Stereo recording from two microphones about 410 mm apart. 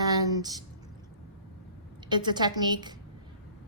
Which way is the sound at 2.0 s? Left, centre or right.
Centre.